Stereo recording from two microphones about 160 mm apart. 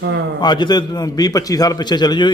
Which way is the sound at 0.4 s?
25° left (ahead or behind).